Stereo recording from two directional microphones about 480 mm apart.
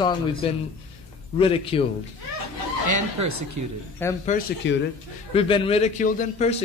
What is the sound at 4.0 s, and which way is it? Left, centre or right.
Speech, centre.